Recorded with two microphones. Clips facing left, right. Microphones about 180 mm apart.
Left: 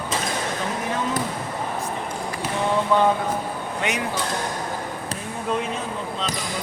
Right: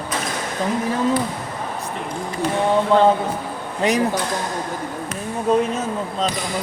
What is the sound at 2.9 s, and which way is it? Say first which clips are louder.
Speech: right 4 dB; 30° right (ahead or behind).